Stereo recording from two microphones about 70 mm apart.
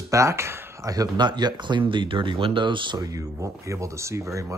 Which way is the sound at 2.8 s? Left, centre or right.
Right.